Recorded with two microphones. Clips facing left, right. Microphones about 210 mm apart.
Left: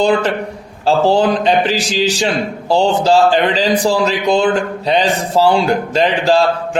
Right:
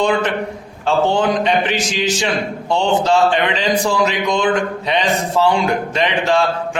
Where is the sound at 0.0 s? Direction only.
35° left (ahead or behind).